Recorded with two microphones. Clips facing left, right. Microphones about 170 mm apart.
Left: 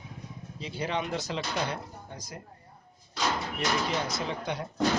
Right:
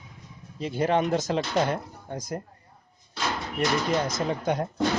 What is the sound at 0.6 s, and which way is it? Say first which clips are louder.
Speech: right 8 dB; 50° right (ahead or behind).